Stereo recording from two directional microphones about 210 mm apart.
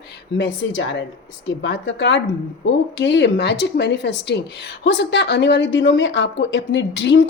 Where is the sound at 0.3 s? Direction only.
60° left (ahead or behind).